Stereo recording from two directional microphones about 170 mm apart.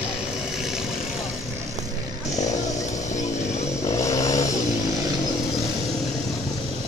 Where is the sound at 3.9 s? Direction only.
20° left (ahead or behind).